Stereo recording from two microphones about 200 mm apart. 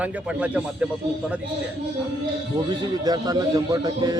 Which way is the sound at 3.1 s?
20° right (ahead or behind).